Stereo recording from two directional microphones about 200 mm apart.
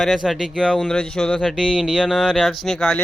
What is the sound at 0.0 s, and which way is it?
Speech, centre (ahead or behind).